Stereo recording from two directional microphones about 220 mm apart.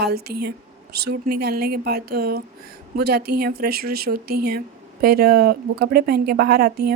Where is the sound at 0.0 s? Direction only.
45° right (ahead or behind).